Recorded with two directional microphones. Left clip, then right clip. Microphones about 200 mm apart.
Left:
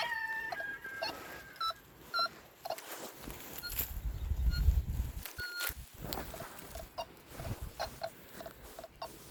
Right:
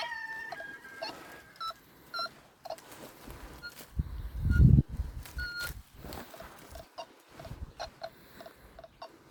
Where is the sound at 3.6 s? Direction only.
10° right (ahead or behind).